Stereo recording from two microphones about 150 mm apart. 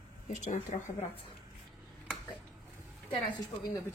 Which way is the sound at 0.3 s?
55° left (ahead or behind).